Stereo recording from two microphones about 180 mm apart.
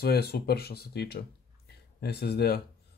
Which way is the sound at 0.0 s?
60° left (ahead or behind).